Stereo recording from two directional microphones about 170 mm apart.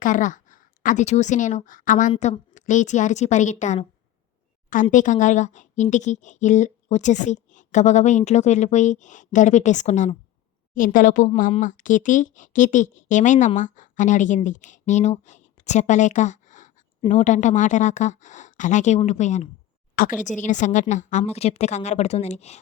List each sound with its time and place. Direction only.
0.0 s speech: 50° left (ahead or behind)
20.0 s speech: 60° left (ahead or behind)
20.4 s a woman's voice: 45° left (ahead or behind)